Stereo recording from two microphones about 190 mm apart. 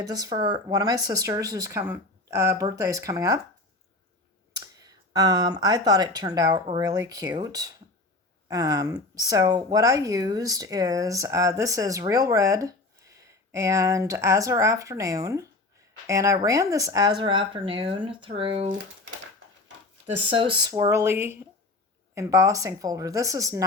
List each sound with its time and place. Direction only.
0.0 s speech: 20° right (ahead or behind)
4.6 s speech: 20° right (ahead or behind)
20.3 s speech: 25° right (ahead or behind)